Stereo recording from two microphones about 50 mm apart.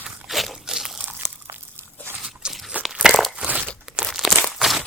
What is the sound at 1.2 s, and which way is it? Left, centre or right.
Crunch, centre.